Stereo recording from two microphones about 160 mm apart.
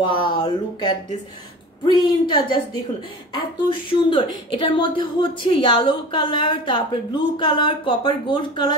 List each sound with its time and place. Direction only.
0.0 s a woman's voice: 30° left (ahead or behind)
4.1 s a woman's voice: 30° left (ahead or behind)